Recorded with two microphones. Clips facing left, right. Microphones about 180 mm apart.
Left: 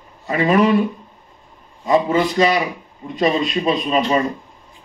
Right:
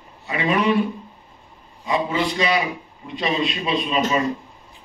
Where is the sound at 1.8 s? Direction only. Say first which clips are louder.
Left 6 dB; 45° left (ahead or behind).